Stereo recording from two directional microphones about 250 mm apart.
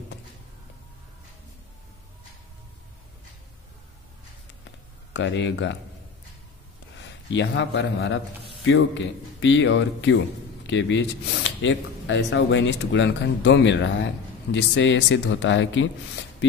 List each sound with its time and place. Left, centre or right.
5.1 s speech: left
7.0 s a man's voice: left